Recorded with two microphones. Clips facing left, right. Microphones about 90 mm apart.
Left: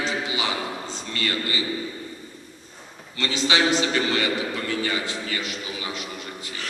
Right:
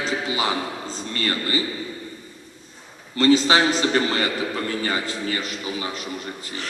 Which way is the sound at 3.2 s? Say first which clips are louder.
Right 6 dB; 40° right (ahead or behind).